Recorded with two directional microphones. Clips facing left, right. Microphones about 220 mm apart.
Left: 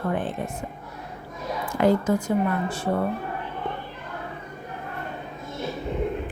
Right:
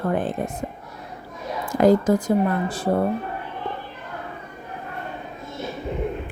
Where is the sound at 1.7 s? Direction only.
40° right (ahead or behind).